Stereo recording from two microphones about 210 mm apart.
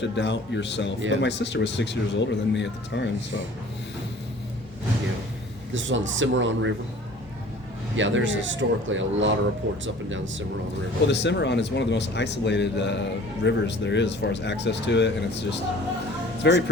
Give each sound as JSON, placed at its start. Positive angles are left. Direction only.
{"t": 0.0, "sound": "speech", "side_deg": 55}
{"t": 5.7, "sound": "speech", "side_deg": -65}
{"t": 7.9, "sound": "speech", "side_deg": -65}
{"t": 11.0, "sound": "speech", "side_deg": 55}